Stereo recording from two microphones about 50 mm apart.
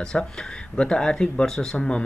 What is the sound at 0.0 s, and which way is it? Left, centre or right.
Speech, centre.